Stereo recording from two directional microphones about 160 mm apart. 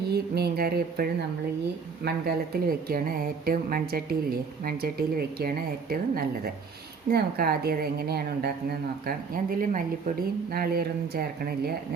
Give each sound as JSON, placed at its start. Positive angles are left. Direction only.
{"t": 0.1, "sound": "a woman's voice", "side_deg": -80}